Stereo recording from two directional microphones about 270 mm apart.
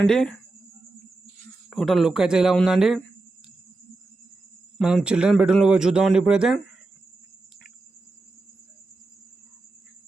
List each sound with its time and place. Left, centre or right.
0.0 s speech: centre
1.7 s speech: centre
4.8 s speech: centre